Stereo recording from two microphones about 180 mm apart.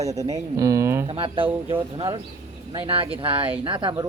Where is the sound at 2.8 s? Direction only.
30° right (ahead or behind).